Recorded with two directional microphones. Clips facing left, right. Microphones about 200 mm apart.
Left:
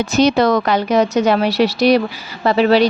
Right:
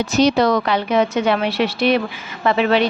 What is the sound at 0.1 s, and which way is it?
Speech, 55° left (ahead or behind).